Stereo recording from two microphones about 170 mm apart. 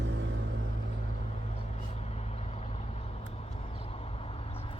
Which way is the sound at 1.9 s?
40° left (ahead or behind).